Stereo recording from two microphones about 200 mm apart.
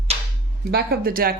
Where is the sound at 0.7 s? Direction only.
50° right (ahead or behind).